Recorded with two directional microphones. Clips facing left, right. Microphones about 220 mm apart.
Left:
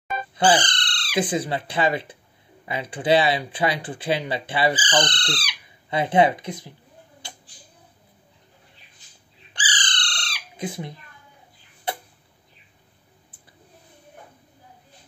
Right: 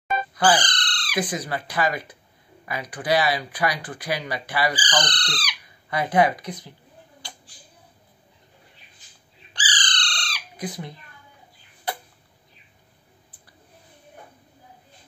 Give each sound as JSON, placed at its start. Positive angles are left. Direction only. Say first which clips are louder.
{"t": 0.3, "sound": "speech", "louder": "left 2 dB", "side_deg": 25}
{"t": 9.5, "sound": "bird", "louder": "even", "side_deg": 25}